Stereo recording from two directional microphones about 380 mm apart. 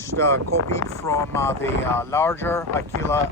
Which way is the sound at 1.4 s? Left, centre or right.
Centre.